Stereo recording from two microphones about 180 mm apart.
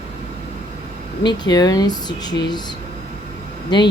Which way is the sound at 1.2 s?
25° left (ahead or behind).